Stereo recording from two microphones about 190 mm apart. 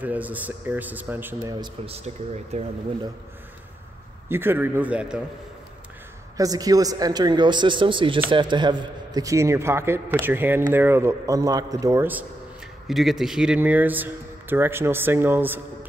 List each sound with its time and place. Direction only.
0.0 s speech: 10° right (ahead or behind)
1.5 s speech: 25° right (ahead or behind)
2.0 s speech: 35° right (ahead or behind)
4.3 s speech: 10° right (ahead or behind)
6.3 s speech: 20° right (ahead or behind)